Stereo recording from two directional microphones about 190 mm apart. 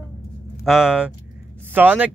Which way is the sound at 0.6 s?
Centre (ahead or behind).